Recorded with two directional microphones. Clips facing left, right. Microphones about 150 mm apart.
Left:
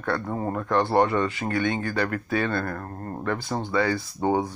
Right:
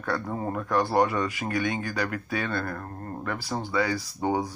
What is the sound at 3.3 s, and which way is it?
Speech, 20° left (ahead or behind).